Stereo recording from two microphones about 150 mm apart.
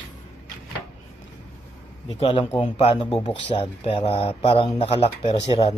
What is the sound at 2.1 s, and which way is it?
Speech, 35° left (ahead or behind).